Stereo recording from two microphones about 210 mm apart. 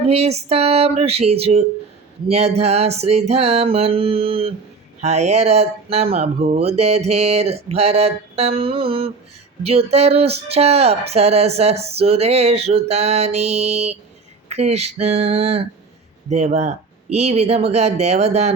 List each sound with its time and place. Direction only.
0.0 s speech: 30° right (ahead or behind)